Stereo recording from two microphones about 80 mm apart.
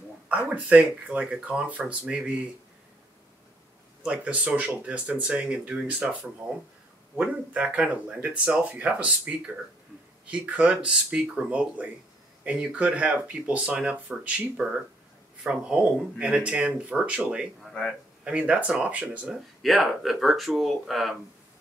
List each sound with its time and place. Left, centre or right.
0.3 s speech: centre
4.0 s speech: centre
7.2 s speech: centre
17.6 s a sound: centre
18.2 s speech: centre
19.6 s speech: centre